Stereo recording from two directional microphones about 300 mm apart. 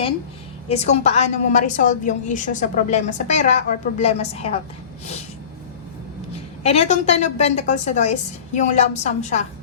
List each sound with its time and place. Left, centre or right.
0.7 s a woman's voice: left
6.6 s a woman's voice: left